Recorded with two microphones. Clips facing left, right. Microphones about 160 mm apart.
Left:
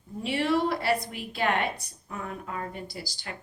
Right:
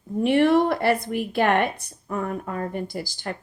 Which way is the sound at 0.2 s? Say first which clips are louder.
Right 8 dB; 55° right (ahead or behind).